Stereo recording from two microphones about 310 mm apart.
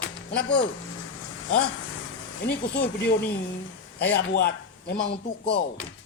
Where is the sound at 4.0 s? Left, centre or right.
Left.